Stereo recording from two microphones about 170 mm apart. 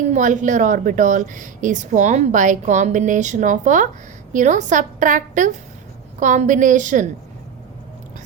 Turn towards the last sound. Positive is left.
turn(degrees=-45)  # may be behind; listen again after turning